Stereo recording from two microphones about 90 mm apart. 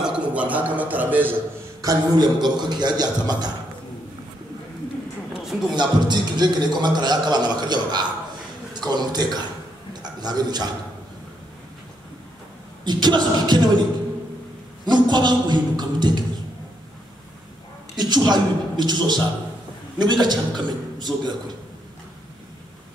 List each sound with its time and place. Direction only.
0.0 s a man's voice: 15° right (ahead or behind)
1.8 s a man's voice: 45° right (ahead or behind)
5.3 s a sound: 5° right (ahead or behind)
5.8 s a man's voice: 55° right (ahead or behind)
12.8 s a man's voice: 55° right (ahead or behind)
14.9 s a man's voice: 55° right (ahead or behind)
17.9 s a man's voice: 50° right (ahead or behind)